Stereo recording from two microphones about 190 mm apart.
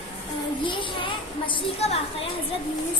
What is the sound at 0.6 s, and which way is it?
A child's voice, 25° left (ahead or behind).